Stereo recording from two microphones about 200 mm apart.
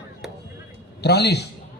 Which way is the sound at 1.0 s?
55° left (ahead or behind).